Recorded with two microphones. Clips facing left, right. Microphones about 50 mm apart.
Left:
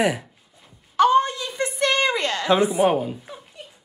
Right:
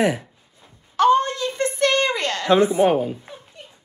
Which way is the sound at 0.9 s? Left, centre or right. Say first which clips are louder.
Even; centre.